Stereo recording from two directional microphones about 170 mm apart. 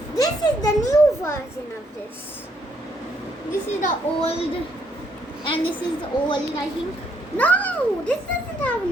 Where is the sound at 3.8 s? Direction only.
35° left (ahead or behind).